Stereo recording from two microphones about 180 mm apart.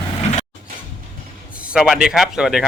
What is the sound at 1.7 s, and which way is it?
Speech, 5° right (ahead or behind).